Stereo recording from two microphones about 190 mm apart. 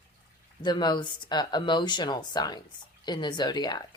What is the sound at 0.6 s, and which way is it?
Speech, 20° left (ahead or behind).